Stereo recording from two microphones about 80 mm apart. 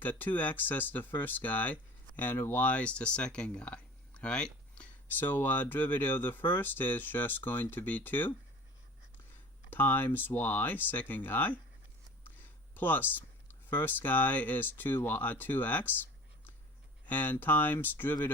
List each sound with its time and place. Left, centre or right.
0.0 s speech: left
9.6 s speech: left
17.1 s speech: left